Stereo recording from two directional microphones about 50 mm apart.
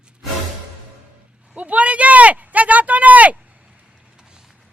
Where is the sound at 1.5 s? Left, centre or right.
Right.